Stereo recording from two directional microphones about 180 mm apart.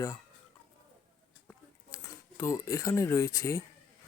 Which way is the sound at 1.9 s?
15° left (ahead or behind).